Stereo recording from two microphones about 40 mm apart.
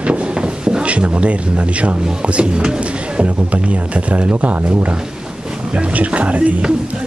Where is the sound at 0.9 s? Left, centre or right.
Right.